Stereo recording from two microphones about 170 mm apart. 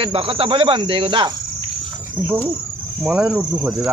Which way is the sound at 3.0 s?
5° right (ahead or behind).